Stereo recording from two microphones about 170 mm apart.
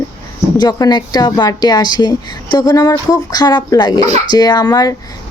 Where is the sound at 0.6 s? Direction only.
25° left (ahead or behind).